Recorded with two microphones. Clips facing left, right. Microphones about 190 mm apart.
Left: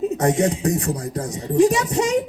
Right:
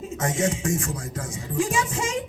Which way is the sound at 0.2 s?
35° left (ahead or behind).